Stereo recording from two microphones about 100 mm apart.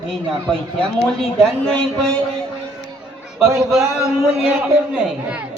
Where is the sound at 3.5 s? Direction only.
30° right (ahead or behind).